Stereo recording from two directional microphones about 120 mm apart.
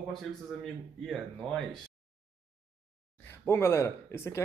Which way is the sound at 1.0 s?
5° left (ahead or behind).